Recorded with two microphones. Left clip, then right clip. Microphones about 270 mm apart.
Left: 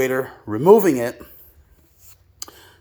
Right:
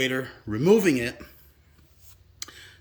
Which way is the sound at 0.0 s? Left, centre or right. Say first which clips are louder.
Left 6 dB; centre.